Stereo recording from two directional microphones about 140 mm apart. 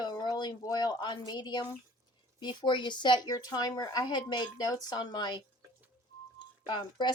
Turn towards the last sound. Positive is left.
turn(degrees=35)  # may be behind; listen again after turning